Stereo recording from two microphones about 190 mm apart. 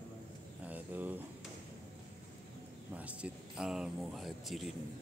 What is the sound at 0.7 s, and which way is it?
Speech, 10° right (ahead or behind).